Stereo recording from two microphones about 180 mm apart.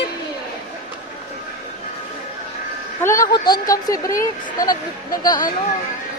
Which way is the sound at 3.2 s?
20° left (ahead or behind).